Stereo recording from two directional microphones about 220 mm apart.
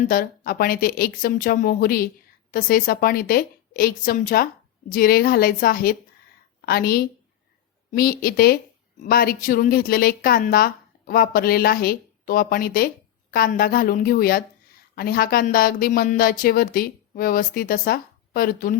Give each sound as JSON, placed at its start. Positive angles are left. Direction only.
{"t": 0.1, "sound": "a woman's voice", "side_deg": 40}